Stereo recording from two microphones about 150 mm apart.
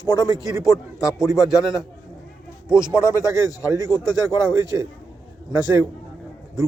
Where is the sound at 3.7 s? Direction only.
20° right (ahead or behind).